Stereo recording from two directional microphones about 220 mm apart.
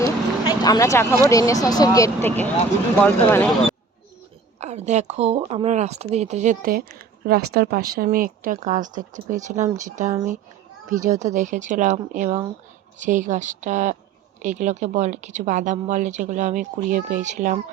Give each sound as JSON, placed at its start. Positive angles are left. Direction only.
{"t": 0.0, "sound": "speech", "side_deg": 15}
{"t": 4.6, "sound": "speech", "side_deg": -30}